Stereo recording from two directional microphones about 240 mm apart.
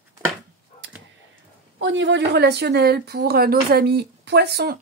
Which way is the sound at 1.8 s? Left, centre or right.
Right.